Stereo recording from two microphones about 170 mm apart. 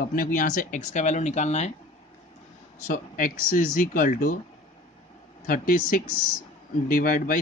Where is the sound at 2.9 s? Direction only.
55° left (ahead or behind).